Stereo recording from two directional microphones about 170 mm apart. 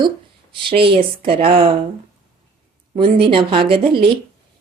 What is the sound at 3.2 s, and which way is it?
Speech, 30° right (ahead or behind).